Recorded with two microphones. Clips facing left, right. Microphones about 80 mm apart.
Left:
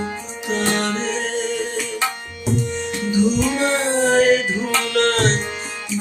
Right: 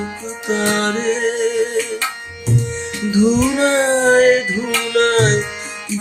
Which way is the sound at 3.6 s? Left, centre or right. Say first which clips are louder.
Right 5 dB; right.